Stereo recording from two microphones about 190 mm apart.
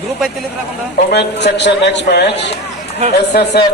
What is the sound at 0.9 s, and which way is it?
A man's voice, 60° left (ahead or behind).